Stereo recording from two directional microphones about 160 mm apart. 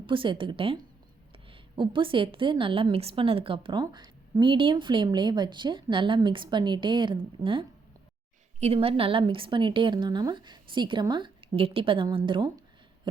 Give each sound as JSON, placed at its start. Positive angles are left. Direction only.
{"t": 0.0, "sound": "a woman's voice", "side_deg": -30}
{"t": 8.6, "sound": "a woman's voice", "side_deg": -35}